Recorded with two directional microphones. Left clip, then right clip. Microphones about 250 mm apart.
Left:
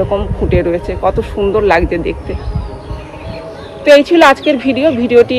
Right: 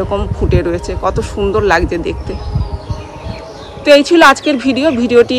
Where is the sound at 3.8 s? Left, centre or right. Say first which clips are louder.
Even; centre.